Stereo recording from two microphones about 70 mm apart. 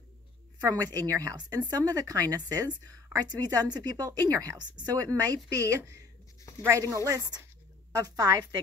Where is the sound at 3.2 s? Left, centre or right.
Right.